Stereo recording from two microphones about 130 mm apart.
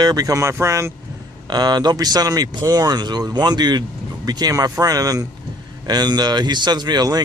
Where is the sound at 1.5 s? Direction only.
35° right (ahead or behind).